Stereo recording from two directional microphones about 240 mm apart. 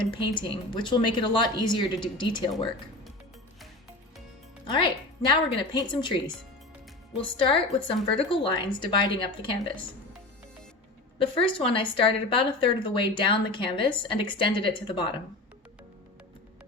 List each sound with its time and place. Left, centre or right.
0.1 s a woman's voice: left
4.6 s a woman's voice: centre
11.2 s a woman's voice: left